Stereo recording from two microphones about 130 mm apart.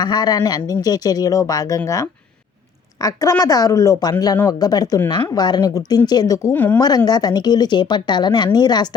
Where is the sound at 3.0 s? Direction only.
25° left (ahead or behind).